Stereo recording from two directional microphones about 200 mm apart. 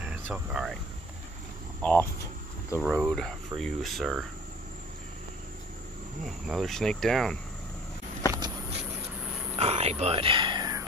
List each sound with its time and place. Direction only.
0.3 s speech: centre (ahead or behind)
1.8 s speech: 10° left (ahead or behind)
6.2 s speech: centre (ahead or behind)
8.3 s a sound: 20° right (ahead or behind)
9.2 s a sound: 5° right (ahead or behind)
9.6 s wild animals: 30° right (ahead or behind)